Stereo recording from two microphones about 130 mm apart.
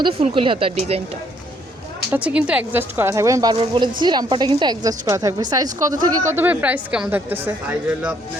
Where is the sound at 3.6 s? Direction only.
35° right (ahead or behind); by 7.5 s 15° right (ahead or behind).